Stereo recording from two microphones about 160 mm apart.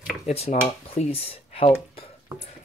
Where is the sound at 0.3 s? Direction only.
40° left (ahead or behind).